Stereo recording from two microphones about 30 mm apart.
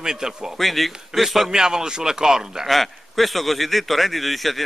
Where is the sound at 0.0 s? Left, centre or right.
Centre.